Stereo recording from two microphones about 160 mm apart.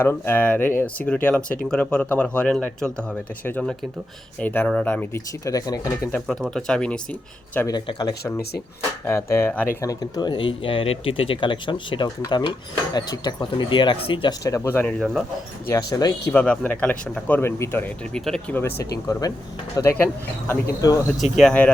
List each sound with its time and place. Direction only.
0.0 s speech: 15° left (ahead or behind)
6.1 s speech: centre (ahead or behind)
7.7 s speech: 25° left (ahead or behind)
9.0 s speech: 15° left (ahead or behind)
9.8 s speech: 20° left (ahead or behind)
14.4 s speech: 20° left (ahead or behind); by 15.2 s centre (ahead or behind)
15.7 s speech: 25° left (ahead or behind)
16.3 s speech: 5° left (ahead or behind)
21.3 s speech: 5° left (ahead or behind)